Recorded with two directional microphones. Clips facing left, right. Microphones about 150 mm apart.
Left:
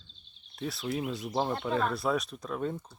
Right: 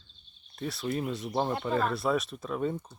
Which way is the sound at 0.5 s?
Centre (ahead or behind).